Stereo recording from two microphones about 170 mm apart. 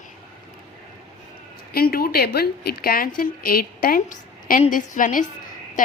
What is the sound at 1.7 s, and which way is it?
A woman's voice, 60° left (ahead or behind).